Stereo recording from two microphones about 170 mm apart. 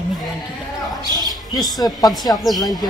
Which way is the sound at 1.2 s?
Centre (ahead or behind).